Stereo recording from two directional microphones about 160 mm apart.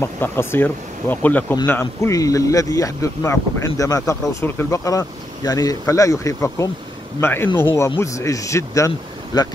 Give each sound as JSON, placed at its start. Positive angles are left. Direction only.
{"t": 0.0, "sound": "speech", "side_deg": 15}